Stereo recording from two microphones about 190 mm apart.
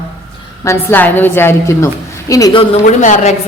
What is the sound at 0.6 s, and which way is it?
A woman's voice, 15° left (ahead or behind).